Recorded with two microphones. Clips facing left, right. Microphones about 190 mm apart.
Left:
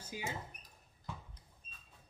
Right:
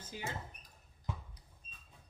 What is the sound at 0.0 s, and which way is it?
Rodents, 10° left (ahead or behind).